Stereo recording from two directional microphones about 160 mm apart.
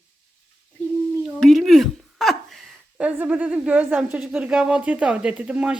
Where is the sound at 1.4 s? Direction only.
Centre (ahead or behind).